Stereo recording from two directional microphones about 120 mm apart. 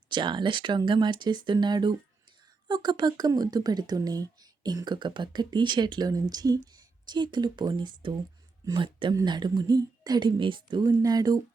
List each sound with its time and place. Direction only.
0.1 s speech: 40° right (ahead or behind)